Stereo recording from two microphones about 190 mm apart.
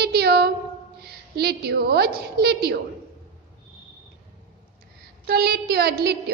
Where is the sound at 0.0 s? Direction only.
60° right (ahead or behind).